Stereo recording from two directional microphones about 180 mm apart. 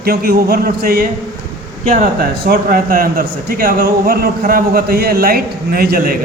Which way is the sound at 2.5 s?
50° right (ahead or behind).